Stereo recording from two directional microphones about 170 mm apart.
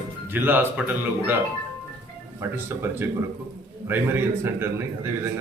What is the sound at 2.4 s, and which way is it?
A man's voice, 15° right (ahead or behind).